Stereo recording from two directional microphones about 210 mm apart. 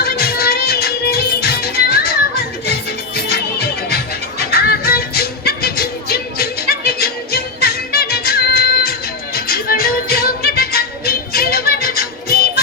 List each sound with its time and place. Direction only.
0.0 s music: 50° left (ahead or behind)
3.2 s music: 50° left (ahead or behind)